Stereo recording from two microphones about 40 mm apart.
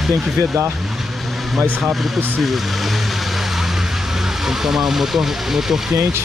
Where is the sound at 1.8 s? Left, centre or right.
Centre.